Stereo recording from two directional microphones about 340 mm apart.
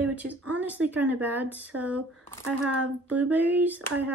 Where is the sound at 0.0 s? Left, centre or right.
Centre.